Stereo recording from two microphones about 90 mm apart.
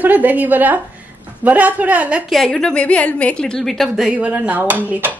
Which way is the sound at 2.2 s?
5° left (ahead or behind).